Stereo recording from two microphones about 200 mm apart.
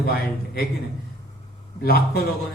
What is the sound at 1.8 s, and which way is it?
Speech, 50° left (ahead or behind).